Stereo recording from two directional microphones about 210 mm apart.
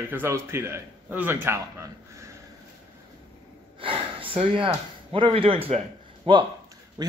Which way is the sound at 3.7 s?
25° right (ahead or behind).